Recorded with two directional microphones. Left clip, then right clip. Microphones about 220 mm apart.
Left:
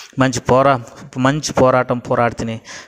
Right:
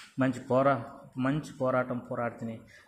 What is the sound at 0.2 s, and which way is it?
Speech, 45° left (ahead or behind).